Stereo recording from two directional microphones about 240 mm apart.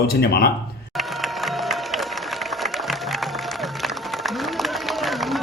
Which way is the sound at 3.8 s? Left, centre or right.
Centre.